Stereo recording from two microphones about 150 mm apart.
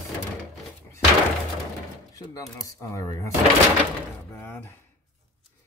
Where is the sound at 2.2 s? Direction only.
20° left (ahead or behind).